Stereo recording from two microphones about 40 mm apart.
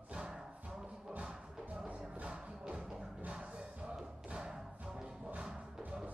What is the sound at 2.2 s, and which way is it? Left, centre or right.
Music, right.